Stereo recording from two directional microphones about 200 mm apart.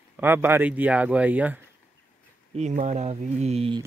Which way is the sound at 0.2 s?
10° right (ahead or behind).